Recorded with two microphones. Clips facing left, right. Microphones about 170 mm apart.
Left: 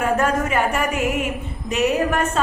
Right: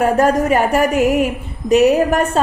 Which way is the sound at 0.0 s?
40° right (ahead or behind).